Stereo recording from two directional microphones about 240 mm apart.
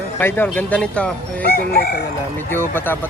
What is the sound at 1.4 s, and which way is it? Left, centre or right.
Chicken, left.